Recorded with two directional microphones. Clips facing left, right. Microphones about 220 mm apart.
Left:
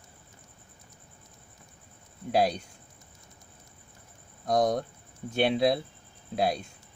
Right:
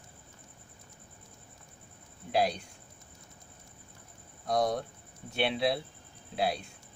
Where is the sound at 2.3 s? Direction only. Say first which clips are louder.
Left 3 dB; 45° left (ahead or behind).